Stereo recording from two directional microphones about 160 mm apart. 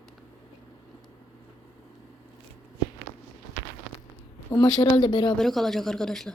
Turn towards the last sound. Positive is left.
turn(degrees=5)  # may be behind; listen again after turning